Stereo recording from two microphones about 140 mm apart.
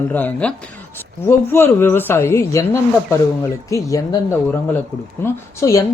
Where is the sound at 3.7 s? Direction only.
25° left (ahead or behind).